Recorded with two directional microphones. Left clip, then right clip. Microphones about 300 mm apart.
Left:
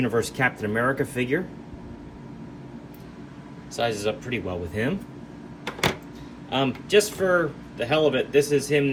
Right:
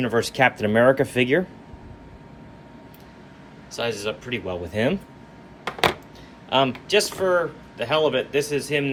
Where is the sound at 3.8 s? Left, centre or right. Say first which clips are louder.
Left 1 dB; centre.